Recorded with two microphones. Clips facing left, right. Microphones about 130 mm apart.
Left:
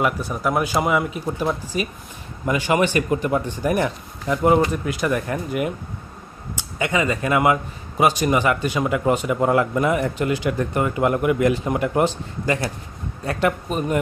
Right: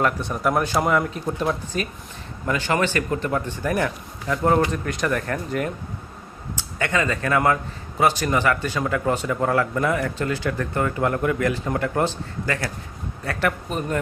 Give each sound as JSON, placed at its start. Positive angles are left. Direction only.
{"t": 0.0, "sound": "a man's voice", "side_deg": 5}